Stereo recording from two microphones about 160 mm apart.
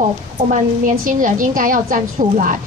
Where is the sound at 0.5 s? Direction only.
55° right (ahead or behind).